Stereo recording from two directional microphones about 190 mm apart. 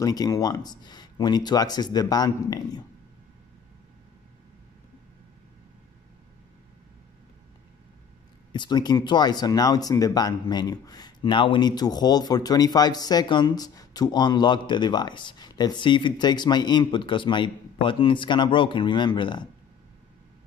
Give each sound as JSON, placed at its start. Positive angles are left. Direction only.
{"t": 0.0, "sound": "speech", "side_deg": 20}
{"t": 8.5, "sound": "speech", "side_deg": 25}